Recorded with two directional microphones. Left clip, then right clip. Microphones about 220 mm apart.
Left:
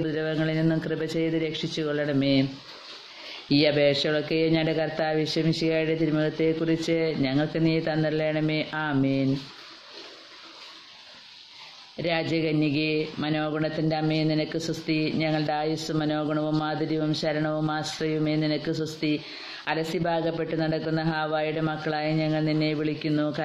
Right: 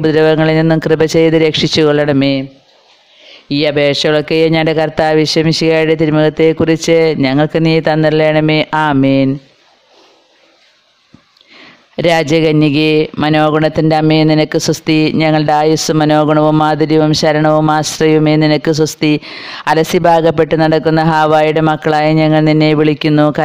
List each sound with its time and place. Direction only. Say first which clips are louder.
0.0 s speech: right 18 dB; 50° right (ahead or behind)
12.0 s speech: right 16 dB; 50° right (ahead or behind)